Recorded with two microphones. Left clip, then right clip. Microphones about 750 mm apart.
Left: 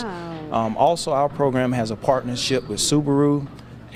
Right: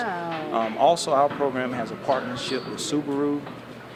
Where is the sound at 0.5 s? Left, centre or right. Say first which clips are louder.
Left 2 dB; left.